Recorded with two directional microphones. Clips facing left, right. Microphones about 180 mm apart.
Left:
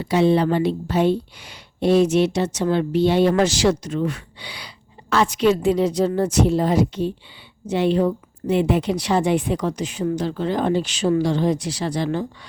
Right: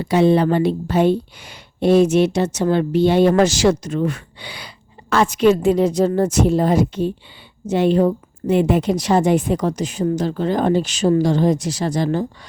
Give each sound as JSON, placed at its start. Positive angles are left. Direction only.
{"t": 0.0, "sound": "speech", "side_deg": -50}